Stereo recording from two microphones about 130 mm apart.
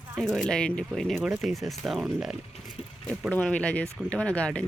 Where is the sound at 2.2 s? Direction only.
Centre (ahead or behind).